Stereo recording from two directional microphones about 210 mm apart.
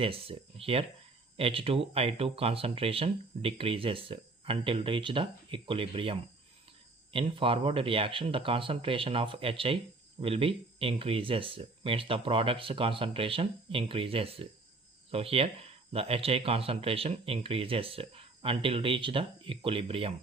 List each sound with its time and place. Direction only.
0.0 s speech: 25° right (ahead or behind)